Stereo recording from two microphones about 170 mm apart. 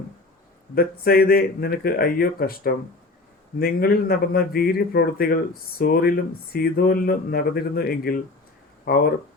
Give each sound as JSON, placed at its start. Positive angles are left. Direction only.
{"t": 0.8, "sound": "a man's voice", "side_deg": 60}